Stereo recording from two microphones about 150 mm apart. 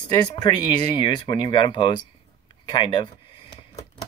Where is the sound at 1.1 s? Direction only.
30° left (ahead or behind).